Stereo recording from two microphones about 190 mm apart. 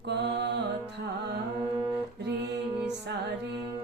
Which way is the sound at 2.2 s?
65° right (ahead or behind).